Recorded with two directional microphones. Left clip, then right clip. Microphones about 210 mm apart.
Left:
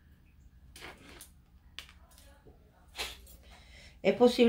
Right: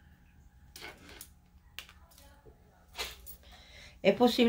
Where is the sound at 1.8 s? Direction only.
10° right (ahead or behind).